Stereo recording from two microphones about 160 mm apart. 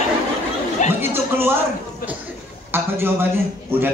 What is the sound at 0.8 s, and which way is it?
Chatter, 50° left (ahead or behind).